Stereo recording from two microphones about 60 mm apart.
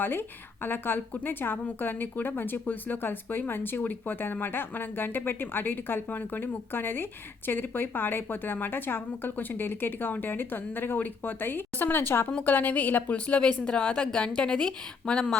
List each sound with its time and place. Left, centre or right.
0.0 s a woman's voice: left; by 15.4 s centre